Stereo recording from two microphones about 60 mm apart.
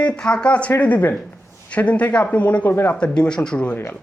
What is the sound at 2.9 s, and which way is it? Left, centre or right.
Speech, centre.